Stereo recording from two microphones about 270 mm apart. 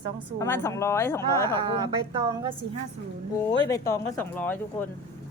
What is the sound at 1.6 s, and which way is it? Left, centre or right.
Speech, centre.